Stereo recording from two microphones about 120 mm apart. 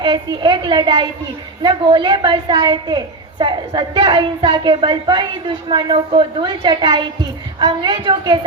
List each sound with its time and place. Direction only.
0.0 s a woman's voice: 40° right (ahead or behind)